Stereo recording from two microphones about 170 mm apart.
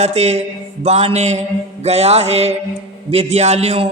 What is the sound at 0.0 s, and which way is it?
A man's voice, 40° right (ahead or behind).